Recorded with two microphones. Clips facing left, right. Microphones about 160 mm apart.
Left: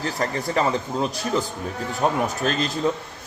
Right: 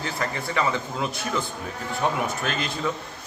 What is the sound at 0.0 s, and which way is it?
Speech, 40° left (ahead or behind).